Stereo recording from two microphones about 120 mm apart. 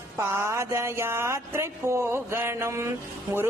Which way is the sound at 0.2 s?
20° right (ahead or behind).